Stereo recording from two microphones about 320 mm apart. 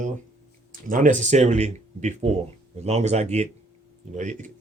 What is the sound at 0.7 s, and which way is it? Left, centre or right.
Speech, right.